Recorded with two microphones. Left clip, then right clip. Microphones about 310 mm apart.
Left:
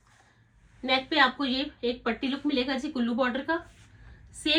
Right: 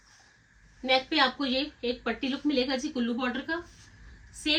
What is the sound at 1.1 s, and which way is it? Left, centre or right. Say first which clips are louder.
A woman's voice: left 2 dB; centre.